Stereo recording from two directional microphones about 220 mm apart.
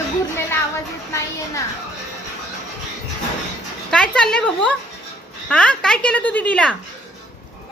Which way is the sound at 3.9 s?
5° left (ahead or behind).